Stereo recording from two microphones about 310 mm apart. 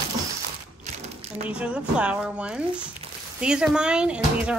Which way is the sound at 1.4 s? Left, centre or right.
Centre.